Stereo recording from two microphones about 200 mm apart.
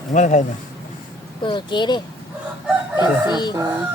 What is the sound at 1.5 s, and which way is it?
Speech, 25° left (ahead or behind).